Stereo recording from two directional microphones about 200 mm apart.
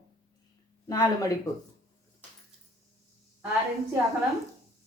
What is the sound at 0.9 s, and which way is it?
Speech, 15° left (ahead or behind).